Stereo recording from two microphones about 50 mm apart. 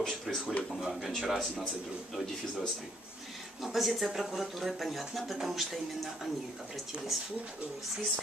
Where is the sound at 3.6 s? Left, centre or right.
Centre.